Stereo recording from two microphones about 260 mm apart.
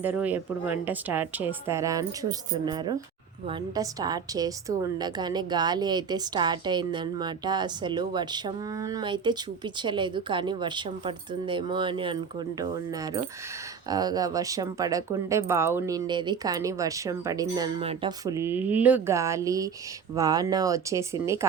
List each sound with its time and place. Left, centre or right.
0.0 s a woman's voice: centre
13.9 s a woman's voice: centre